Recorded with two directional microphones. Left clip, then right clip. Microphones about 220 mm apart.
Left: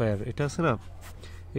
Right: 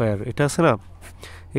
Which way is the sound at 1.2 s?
35° right (ahead or behind).